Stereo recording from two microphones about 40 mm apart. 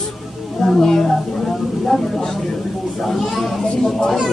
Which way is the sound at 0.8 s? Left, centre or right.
Centre.